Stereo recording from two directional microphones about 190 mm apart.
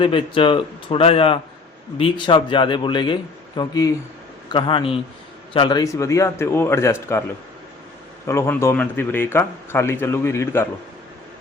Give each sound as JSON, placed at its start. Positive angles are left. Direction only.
{"t": 0.0, "sound": "a man's voice", "side_deg": 25}
{"t": 8.3, "sound": "a man's voice", "side_deg": 15}